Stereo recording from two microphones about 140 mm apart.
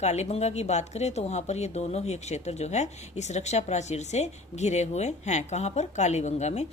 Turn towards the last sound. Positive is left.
turn(degrees=55)  # may be behind; listen again after turning